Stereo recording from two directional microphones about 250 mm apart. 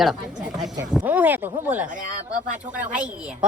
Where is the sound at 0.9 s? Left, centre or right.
Centre.